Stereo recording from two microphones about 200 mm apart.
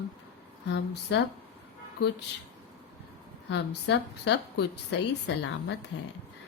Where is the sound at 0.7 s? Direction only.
60° left (ahead or behind).